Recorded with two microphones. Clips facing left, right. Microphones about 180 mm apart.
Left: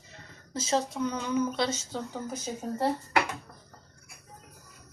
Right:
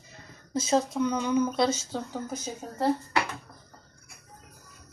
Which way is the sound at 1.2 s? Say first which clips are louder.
Right 3 dB; 20° right (ahead or behind).